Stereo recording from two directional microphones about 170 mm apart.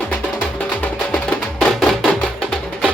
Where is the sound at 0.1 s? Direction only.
5° left (ahead or behind).